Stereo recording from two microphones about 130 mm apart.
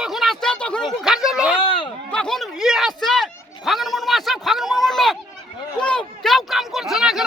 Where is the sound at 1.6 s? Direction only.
45° left (ahead or behind).